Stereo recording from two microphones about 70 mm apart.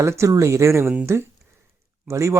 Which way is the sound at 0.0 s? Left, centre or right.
Right.